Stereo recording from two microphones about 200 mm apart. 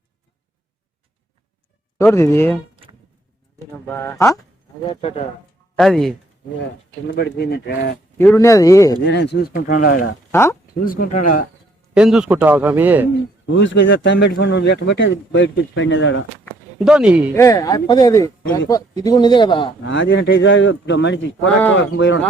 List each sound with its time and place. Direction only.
2.0 s speech: 15° left (ahead or behind)
3.8 s speech: 10° left (ahead or behind)
4.8 s speech: 25° left (ahead or behind)
5.7 s speech: centre (ahead or behind)
7.1 s speech: 55° left (ahead or behind)
8.2 s speech: 10° left (ahead or behind)
9.0 s speech: 60° left (ahead or behind)
10.3 s speech: 15° left (ahead or behind)
10.8 s speech: 45° left (ahead or behind)
11.9 s a man's voice: 5° right (ahead or behind)
13.6 s a man's voice: 65° left (ahead or behind)
16.8 s speech: 5° right (ahead or behind)
17.3 s speech: 15° left (ahead or behind)
19.8 s a man's voice: 70° left (ahead or behind)